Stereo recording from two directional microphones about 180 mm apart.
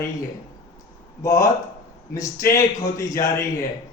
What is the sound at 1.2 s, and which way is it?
Speech, 15° left (ahead or behind).